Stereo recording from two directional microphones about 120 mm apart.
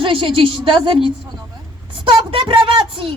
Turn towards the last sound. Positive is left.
turn(degrees=-45)  # may be behind; listen again after turning